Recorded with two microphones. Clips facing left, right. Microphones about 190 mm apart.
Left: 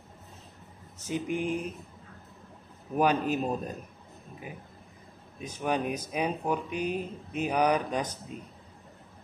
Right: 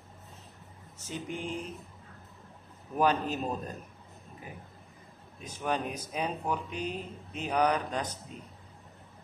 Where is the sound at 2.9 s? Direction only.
15° left (ahead or behind).